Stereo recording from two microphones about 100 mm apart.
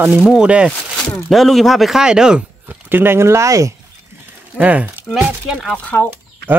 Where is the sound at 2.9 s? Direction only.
20° right (ahead or behind).